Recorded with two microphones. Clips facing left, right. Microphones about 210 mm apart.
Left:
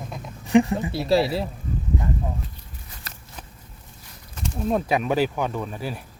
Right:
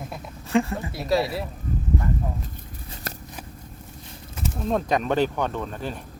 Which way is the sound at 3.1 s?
50° right (ahead or behind).